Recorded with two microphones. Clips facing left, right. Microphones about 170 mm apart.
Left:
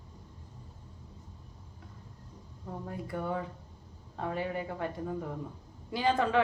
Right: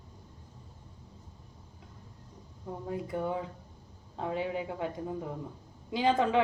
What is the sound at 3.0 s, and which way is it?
A woman's voice, 15° right (ahead or behind).